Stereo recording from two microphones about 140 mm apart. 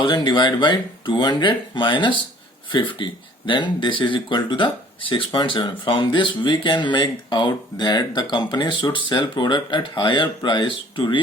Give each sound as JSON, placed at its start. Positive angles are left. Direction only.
{"t": 0.0, "sound": "speech", "side_deg": 30}